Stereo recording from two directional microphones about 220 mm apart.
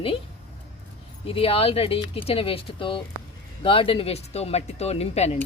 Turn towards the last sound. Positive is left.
turn(degrees=30)  # may be behind; listen again after turning